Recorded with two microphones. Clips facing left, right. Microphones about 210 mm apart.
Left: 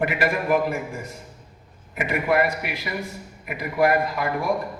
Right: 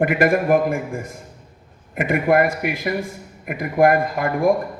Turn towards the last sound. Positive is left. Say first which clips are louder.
# right 6 dB
turn(degrees=-50)  # may be behind; listen again after turning